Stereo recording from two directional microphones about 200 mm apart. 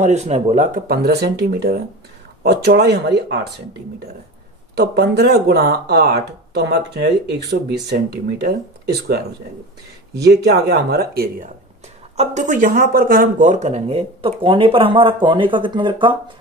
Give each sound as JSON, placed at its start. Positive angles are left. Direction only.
{"t": 0.0, "sound": "speech", "side_deg": -35}
{"t": 4.7, "sound": "speech", "side_deg": -55}
{"t": 10.1, "sound": "speech", "side_deg": -55}